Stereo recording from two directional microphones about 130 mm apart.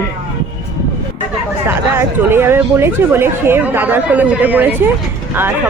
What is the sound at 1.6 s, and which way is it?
Speech, 15° right (ahead or behind).